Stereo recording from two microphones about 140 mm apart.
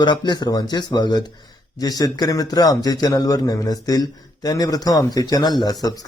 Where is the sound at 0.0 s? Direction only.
30° left (ahead or behind).